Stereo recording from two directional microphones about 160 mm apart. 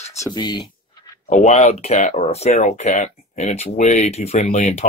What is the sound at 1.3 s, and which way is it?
Speech, 50° left (ahead or behind).